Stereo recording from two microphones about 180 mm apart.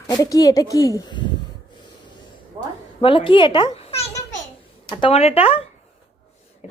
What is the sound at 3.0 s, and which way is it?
A child's voice, 30° left (ahead or behind).